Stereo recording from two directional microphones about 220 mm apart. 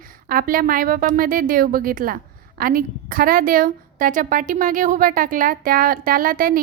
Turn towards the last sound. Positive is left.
turn(degrees=-40)  # may be behind; listen again after turning